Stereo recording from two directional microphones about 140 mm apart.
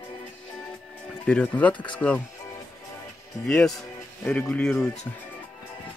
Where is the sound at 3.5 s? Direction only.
5° left (ahead or behind).